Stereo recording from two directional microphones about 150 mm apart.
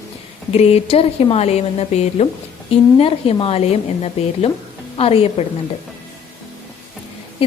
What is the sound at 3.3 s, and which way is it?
A woman's voice, 40° left (ahead or behind).